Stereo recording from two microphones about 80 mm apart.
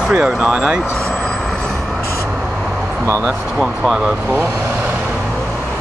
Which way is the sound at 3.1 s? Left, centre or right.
Right.